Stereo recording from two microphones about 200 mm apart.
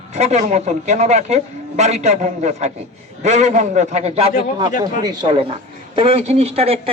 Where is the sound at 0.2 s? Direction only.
35° right (ahead or behind).